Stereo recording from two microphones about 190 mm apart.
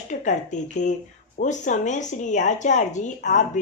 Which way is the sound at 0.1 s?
40° left (ahead or behind).